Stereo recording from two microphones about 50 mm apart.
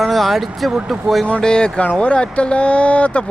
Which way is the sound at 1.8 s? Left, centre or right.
Left.